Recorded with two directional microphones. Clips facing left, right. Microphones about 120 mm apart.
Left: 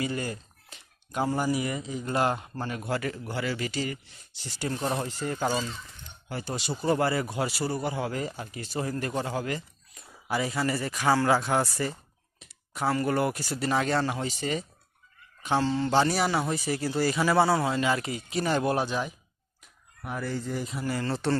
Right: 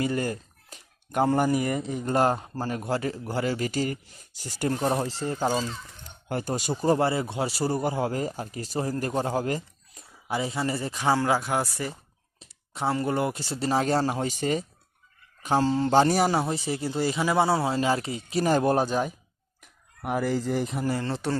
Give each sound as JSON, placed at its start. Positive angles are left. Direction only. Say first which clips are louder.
{"t": 0.0, "sound": "speech", "louder": "right 4 dB", "side_deg": -45}
{"t": 4.9, "sound": "speech", "louder": "right 3 dB", "side_deg": -30}
{"t": 6.2, "sound": "speech", "louder": "right 6 dB", "side_deg": -50}
{"t": 6.5, "sound": "speech", "louder": "right 3 dB", "side_deg": -40}
{"t": 6.9, "sound": "speech", "louder": "even", "side_deg": -25}
{"t": 10.2, "sound": "speech", "louder": "even", "side_deg": -25}
{"t": 12.4, "sound": "speech", "louder": "even", "side_deg": -30}
{"t": 20.0, "sound": "fowl", "louder": "right 6 dB", "side_deg": -75}
{"t": 20.8, "sound": "speech", "louder": "right 1 dB", "side_deg": -25}